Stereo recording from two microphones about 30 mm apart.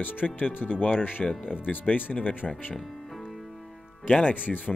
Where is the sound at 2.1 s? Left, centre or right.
Left.